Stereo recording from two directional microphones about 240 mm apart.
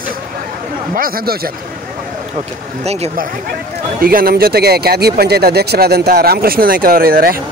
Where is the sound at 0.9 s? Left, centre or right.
Right.